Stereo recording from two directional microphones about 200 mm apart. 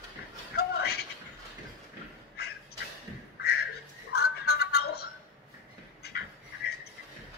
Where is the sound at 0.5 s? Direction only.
55° left (ahead or behind).